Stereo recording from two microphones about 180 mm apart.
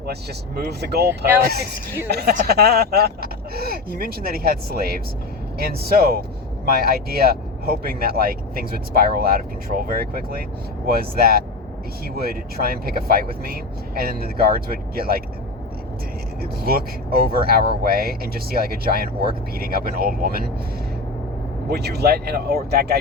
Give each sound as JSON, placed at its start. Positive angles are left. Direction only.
{"t": 0.1, "sound": "speech", "side_deg": -65}
{"t": 16.4, "sound": "speech", "side_deg": -55}
{"t": 21.7, "sound": "speech", "side_deg": -65}